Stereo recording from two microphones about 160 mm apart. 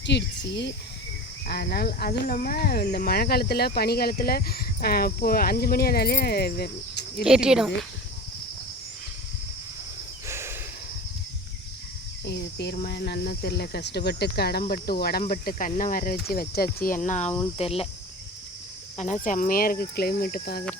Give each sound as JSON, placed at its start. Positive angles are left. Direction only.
{"t": 0.0, "sound": "speech", "side_deg": 90}
{"t": 7.3, "sound": "speech", "side_deg": -5}
{"t": 10.2, "sound": "a sound", "side_deg": -15}
{"t": 12.2, "sound": "speech", "side_deg": 90}
{"t": 14.6, "sound": "speech", "side_deg": 70}
{"t": 15.2, "sound": "speech", "side_deg": 55}
{"t": 16.3, "sound": "speech", "side_deg": 70}
{"t": 17.6, "sound": "cricket", "side_deg": 40}
{"t": 18.9, "sound": "speech", "side_deg": 50}